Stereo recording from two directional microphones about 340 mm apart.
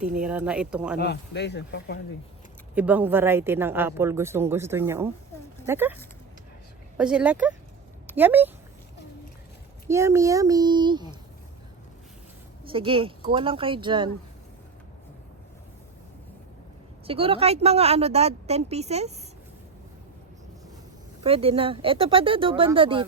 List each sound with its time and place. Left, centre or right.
0.2 s speech: centre
0.9 s speech: left
2.7 s speech: centre
9.9 s speech: centre
12.6 s speech: centre
17.1 s speech: centre
21.2 s speech: centre